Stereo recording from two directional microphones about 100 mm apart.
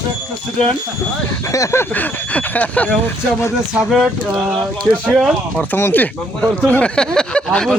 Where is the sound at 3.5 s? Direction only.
5° right (ahead or behind).